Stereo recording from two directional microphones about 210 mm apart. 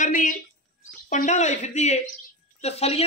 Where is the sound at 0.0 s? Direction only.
40° left (ahead or behind).